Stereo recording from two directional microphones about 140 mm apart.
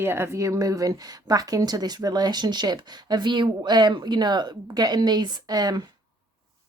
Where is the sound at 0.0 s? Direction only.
15° right (ahead or behind).